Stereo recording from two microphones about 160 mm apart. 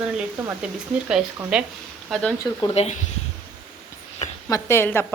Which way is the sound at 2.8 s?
40° left (ahead or behind).